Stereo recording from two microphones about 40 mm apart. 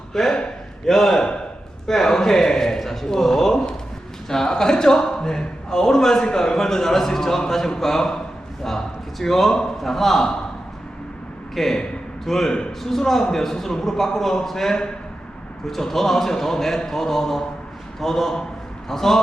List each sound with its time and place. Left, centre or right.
0.1 s a man's voice: centre
11.5 s a man's voice: centre